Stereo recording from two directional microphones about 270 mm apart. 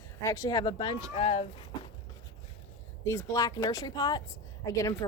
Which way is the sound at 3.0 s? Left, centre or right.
Centre.